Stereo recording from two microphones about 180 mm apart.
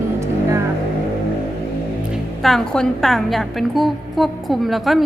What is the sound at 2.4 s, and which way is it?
A woman's voice, 5° left (ahead or behind).